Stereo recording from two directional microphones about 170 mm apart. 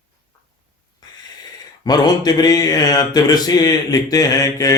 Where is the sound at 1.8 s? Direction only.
25° left (ahead or behind).